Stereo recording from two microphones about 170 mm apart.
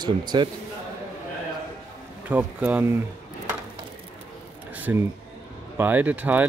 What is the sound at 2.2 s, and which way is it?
Speech, 10° right (ahead or behind).